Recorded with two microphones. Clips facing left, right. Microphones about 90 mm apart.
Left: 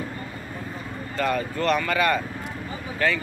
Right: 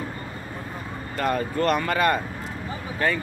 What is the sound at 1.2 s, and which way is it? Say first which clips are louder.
Speech: right 1 dB; 40° right (ahead or behind).